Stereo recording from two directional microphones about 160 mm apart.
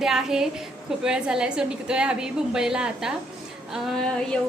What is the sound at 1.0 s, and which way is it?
A woman's voice, 5° right (ahead or behind).